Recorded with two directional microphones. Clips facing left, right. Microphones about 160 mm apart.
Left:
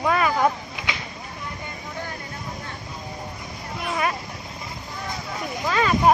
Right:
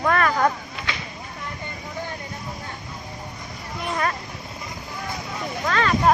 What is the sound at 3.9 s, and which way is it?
Vehicle, 10° left (ahead or behind).